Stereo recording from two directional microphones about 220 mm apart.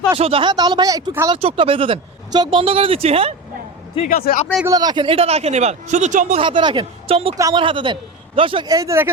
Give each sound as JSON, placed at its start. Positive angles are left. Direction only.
{"t": 0.2, "sound": "speech", "side_deg": -25}
{"t": 4.1, "sound": "speech", "side_deg": 40}
{"t": 4.6, "sound": "speech", "side_deg": -15}